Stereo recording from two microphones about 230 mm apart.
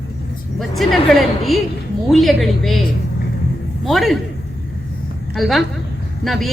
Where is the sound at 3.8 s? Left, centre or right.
Centre.